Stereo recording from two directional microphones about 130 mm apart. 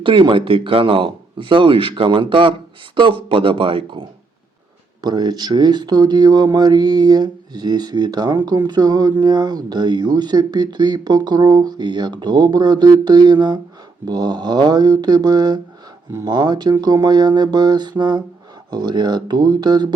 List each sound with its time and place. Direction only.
0.0 s speech: 40° right (ahead or behind)
5.0 s speech: 30° right (ahead or behind)